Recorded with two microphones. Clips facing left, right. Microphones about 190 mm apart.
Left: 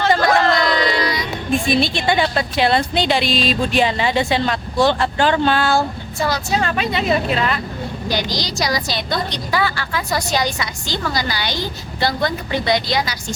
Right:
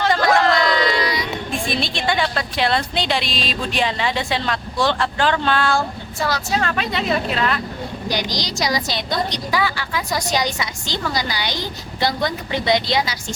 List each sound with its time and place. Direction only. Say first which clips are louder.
0.1 s speech: left 1 dB; centre (ahead or behind)
8.0 s a woman's voice: left 2 dB; 15° right (ahead or behind)